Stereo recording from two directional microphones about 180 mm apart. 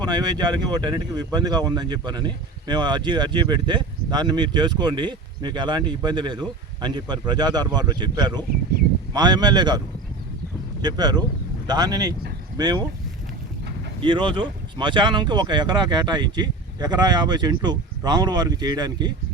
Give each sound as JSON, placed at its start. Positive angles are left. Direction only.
{"t": 0.0, "sound": "speech", "side_deg": -25}
{"t": 10.8, "sound": "speech", "side_deg": -20}
{"t": 14.0, "sound": "speech", "side_deg": -25}